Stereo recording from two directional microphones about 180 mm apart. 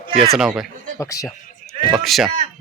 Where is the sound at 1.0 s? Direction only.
15° left (ahead or behind).